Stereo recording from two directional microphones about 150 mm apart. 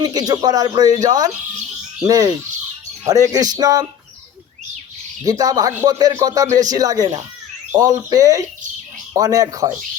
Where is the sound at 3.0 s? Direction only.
25° right (ahead or behind).